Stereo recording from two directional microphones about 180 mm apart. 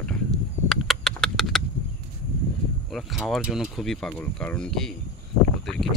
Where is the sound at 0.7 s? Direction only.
Centre (ahead or behind).